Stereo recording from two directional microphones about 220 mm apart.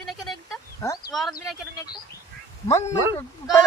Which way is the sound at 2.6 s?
15° left (ahead or behind).